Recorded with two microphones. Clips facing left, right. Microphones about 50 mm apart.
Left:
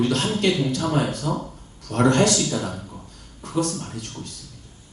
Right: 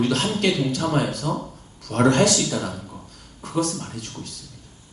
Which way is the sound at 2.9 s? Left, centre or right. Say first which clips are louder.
Even; right.